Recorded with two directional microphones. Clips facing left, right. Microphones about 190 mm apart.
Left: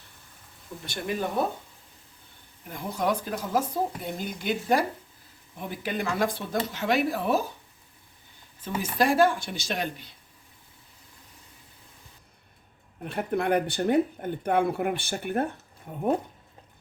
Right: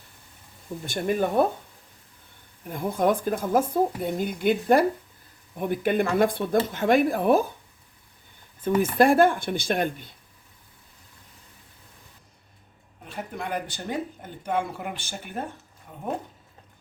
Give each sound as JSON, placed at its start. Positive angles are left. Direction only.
{"t": 0.9, "sound": "speech", "side_deg": -50}
{"t": 2.6, "sound": "speech", "side_deg": -50}
{"t": 8.6, "sound": "speech", "side_deg": -55}
{"t": 13.1, "sound": "speech", "side_deg": 60}